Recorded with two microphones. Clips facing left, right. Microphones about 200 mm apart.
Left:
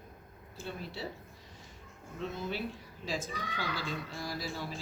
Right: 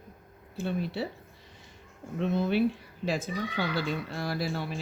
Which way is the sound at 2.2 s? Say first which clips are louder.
Right 11 dB; 65° right (ahead or behind).